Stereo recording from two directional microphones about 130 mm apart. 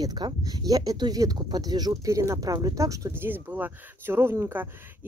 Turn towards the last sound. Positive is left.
turn(degrees=-15)  # may be behind; listen again after turning